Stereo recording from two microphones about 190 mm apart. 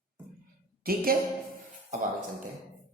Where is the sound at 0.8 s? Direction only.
50° right (ahead or behind).